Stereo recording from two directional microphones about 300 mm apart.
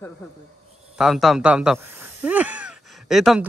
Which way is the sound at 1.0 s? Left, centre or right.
Centre.